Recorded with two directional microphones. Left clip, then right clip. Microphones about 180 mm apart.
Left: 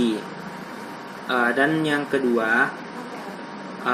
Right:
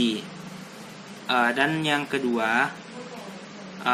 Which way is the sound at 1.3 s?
35° right (ahead or behind).